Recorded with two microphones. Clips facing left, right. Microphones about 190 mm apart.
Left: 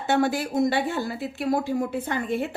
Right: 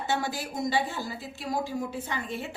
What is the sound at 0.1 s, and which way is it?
Speech, 60° left (ahead or behind).